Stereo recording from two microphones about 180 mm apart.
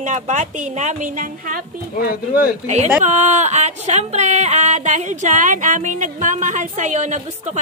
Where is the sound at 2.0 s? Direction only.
55° left (ahead or behind).